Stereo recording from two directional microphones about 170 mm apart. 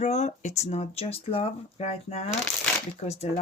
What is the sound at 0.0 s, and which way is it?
Speech, 40° left (ahead or behind).